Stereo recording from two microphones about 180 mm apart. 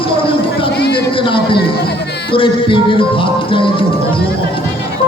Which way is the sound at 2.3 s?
30° left (ahead or behind).